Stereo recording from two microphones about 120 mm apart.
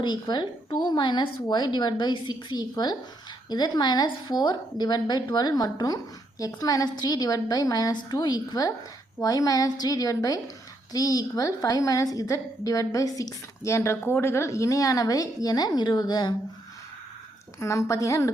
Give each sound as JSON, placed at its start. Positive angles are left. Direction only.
{"t": 0.0, "sound": "a woman's voice", "side_deg": 35}
{"t": 17.6, "sound": "a woman's voice", "side_deg": 25}